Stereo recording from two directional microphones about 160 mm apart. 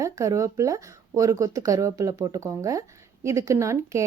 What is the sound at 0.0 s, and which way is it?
A woman's voice, 20° right (ahead or behind).